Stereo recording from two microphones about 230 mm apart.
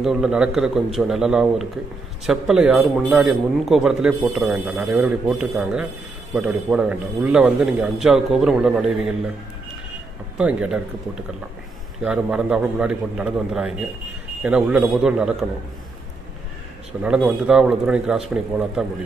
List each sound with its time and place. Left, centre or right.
0.0 s speech: centre
10.3 s speech: centre
12.0 s speech: centre
17.0 s speech: centre